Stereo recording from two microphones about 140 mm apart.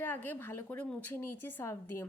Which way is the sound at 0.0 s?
15° left (ahead or behind).